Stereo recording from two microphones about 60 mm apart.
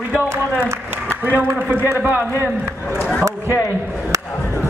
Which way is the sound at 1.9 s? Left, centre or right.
Right.